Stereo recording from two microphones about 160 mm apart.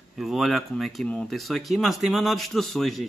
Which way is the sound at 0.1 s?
Centre (ahead or behind).